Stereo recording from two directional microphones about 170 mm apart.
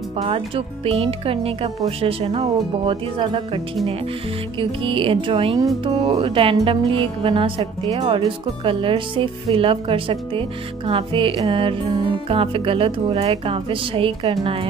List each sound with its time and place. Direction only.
0.2 s speech: 35° right (ahead or behind)